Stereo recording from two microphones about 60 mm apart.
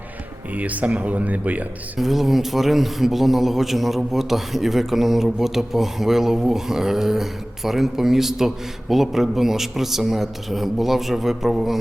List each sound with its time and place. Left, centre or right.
0.5 s speech: right
2.0 s speech: centre